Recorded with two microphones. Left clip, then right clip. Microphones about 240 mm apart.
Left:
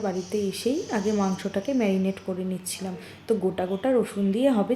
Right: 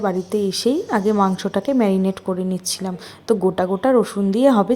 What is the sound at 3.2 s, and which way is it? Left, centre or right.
A woman's voice, right.